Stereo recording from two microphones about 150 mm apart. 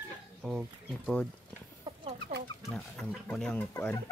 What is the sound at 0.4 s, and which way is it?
Speech, 5° right (ahead or behind).